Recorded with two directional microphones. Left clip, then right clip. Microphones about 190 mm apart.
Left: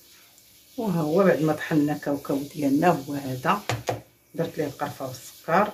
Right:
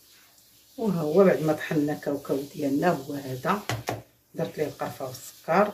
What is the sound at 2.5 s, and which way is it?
Speech, 35° left (ahead or behind).